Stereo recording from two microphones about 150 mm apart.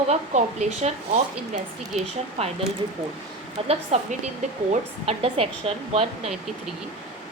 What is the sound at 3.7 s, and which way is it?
A woman's voice, 45° right (ahead or behind).